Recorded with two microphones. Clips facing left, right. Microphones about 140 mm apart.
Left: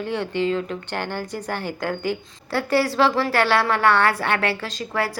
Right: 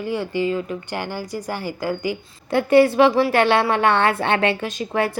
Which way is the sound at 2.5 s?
20° right (ahead or behind).